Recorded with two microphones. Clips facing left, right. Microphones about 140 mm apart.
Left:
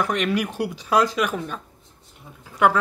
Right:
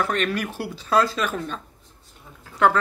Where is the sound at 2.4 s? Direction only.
10° left (ahead or behind).